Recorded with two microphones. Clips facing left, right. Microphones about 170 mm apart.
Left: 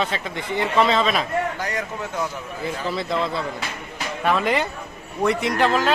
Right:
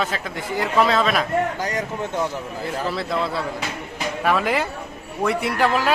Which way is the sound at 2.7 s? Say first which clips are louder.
Even; centre (ahead or behind).